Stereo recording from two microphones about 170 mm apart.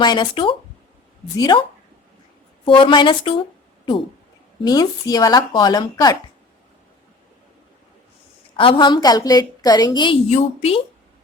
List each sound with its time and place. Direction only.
0.0 s a woman's voice: 25° left (ahead or behind)
2.6 s a woman's voice: 30° left (ahead or behind)
4.6 s a woman's voice: 20° left (ahead or behind)
8.5 s a woman's voice: 30° left (ahead or behind)
10.2 s a woman's voice: 35° left (ahead or behind)